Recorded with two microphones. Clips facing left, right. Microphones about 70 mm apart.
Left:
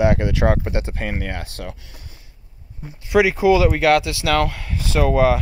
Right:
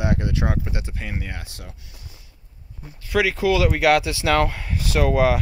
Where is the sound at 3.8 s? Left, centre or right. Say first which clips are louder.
Left 2 dB; centre.